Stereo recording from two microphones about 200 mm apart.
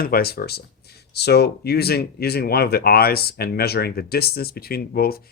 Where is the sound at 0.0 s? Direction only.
50° left (ahead or behind).